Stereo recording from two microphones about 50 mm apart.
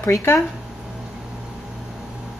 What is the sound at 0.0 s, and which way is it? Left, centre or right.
Speech, left.